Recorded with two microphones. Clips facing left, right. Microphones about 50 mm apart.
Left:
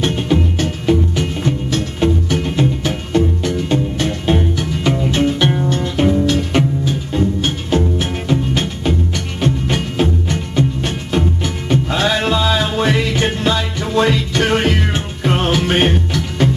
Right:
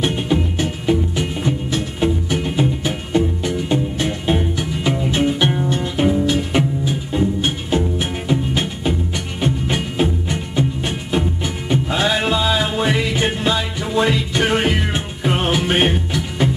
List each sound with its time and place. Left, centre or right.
0.0 s music: centre